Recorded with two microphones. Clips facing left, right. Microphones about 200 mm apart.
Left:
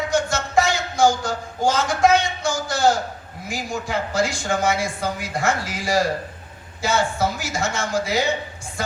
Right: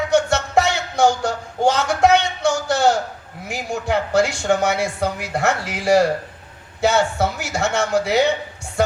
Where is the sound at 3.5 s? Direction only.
65° right (ahead or behind).